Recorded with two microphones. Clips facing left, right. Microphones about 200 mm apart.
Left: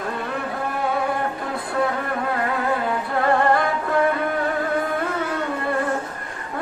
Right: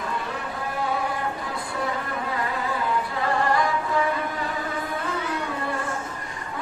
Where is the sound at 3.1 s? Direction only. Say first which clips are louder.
Left 9 dB; 55° left (ahead or behind).